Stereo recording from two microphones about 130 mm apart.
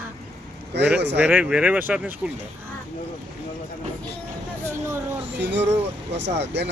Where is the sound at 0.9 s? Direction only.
15° right (ahead or behind).